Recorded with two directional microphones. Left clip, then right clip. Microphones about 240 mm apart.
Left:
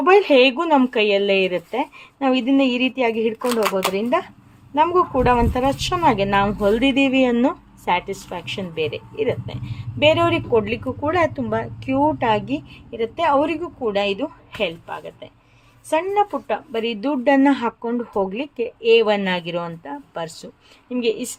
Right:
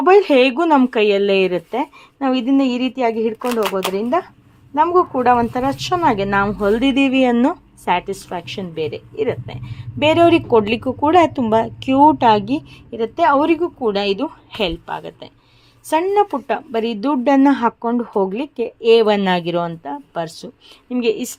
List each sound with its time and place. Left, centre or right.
0.0 s speech: centre
3.4 s speech: centre
4.7 s a woman's voice: centre